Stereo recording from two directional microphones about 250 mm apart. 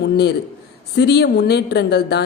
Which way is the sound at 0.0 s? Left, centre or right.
Left.